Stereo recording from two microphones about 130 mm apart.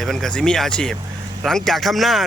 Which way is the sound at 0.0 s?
5° left (ahead or behind).